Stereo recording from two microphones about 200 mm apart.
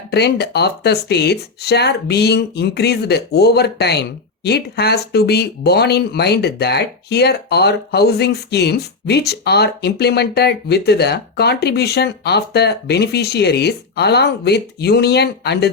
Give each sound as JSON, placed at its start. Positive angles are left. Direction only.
{"t": 0.1, "sound": "speech", "side_deg": 55}